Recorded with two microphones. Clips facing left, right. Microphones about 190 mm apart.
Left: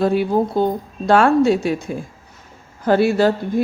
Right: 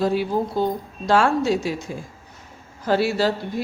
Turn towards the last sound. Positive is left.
turn(degrees=50)  # may be behind; listen again after turning